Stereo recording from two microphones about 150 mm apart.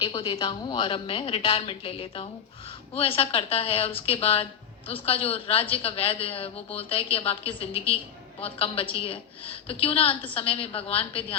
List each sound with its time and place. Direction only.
0.0 s a woman's voice: 35° left (ahead or behind)